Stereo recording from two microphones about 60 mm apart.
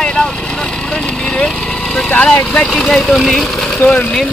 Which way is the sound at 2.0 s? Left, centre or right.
Left.